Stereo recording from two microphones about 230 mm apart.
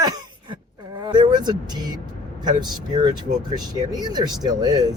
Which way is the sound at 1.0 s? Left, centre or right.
Centre.